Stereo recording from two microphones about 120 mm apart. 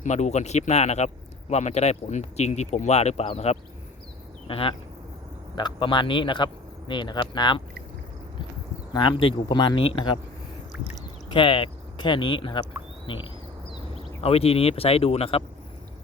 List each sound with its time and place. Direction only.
0.0 s speech: 75° left (ahead or behind)
4.4 s speech: 50° left (ahead or behind)
5.5 s a man's voice: 40° left (ahead or behind)
8.9 s a man's voice: 45° left (ahead or behind)
11.3 s speech: 45° left (ahead or behind)
13.1 s a sound: 45° left (ahead or behind)
14.2 s speech: 55° left (ahead or behind)